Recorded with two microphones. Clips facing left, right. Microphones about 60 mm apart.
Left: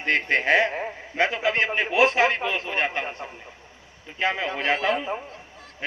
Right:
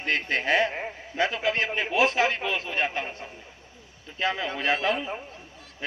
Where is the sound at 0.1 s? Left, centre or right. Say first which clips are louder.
Left 4 dB; left.